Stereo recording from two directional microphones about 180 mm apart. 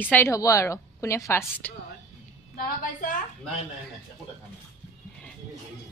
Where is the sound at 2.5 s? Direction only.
50° left (ahead or behind).